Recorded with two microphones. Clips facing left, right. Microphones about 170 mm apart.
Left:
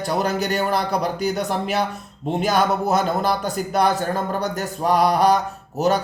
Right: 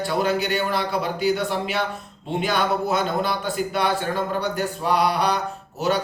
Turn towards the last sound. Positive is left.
turn(degrees=40)  # may be behind; listen again after turning